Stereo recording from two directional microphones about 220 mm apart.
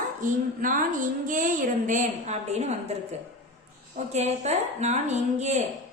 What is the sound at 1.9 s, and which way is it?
Speech, 35° right (ahead or behind).